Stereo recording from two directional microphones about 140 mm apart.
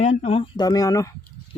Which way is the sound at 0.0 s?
55° left (ahead or behind).